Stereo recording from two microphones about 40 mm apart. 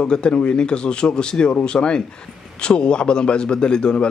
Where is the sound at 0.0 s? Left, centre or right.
Left.